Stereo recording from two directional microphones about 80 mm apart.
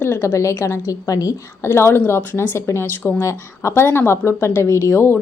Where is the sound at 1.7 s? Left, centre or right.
Left.